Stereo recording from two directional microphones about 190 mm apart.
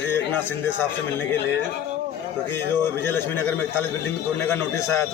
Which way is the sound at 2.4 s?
15° left (ahead or behind).